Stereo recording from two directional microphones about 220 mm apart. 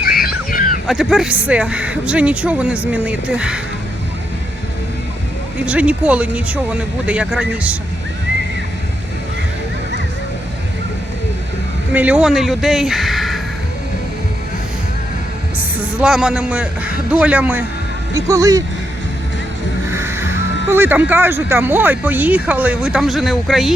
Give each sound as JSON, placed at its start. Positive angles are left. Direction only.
{"t": 0.0, "sound": "music", "side_deg": 45}
{"t": 0.9, "sound": "speech", "side_deg": 0}
{"t": 5.6, "sound": "speech", "side_deg": -5}
{"t": 11.9, "sound": "speech", "side_deg": -5}
{"t": 15.8, "sound": "speech", "side_deg": -5}
{"t": 19.9, "sound": "music", "side_deg": -10}
{"t": 20.7, "sound": "speech", "side_deg": -10}